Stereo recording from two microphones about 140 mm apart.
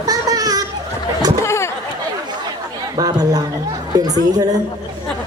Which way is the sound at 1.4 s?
20° left (ahead or behind).